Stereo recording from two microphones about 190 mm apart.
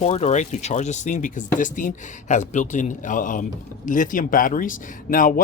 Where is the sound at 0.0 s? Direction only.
35° left (ahead or behind).